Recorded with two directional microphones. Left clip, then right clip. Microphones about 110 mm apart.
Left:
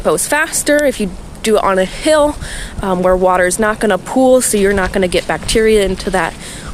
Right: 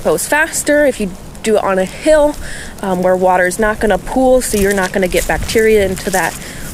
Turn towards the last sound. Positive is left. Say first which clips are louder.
# even
turn(degrees=35)  # may be behind; listen again after turning